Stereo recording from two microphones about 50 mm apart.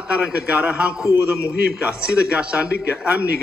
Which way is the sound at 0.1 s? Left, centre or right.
Right.